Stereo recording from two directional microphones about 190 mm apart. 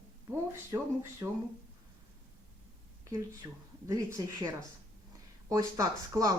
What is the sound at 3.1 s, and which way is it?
Speech, 15° right (ahead or behind).